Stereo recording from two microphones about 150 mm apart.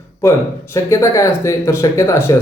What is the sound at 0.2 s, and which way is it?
Speech, 20° left (ahead or behind).